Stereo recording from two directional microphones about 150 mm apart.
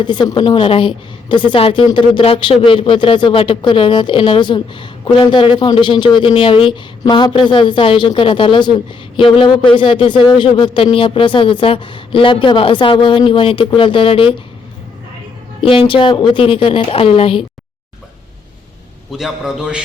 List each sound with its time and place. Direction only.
0.0 s a woman's voice: 30° left (ahead or behind)
15.6 s a woman's voice: 35° left (ahead or behind)
19.1 s a man's voice: 5° right (ahead or behind)